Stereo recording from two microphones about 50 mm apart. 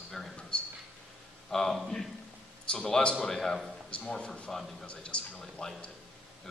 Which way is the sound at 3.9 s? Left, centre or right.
Left.